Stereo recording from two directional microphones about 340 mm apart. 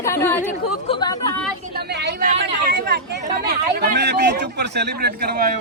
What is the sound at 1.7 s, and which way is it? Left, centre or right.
Chatter, right.